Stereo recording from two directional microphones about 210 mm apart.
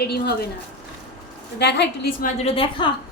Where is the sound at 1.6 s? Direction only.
55° left (ahead or behind).